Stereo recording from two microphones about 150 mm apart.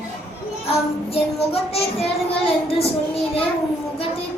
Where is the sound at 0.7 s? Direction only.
40° left (ahead or behind).